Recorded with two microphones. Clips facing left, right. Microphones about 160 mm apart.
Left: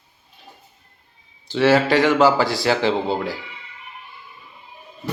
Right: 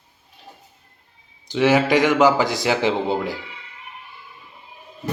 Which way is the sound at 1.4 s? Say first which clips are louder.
Left 1 dB; 15° right (ahead or behind).